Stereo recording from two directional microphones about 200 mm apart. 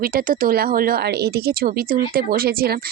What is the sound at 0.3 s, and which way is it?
A woman's voice, 45° right (ahead or behind).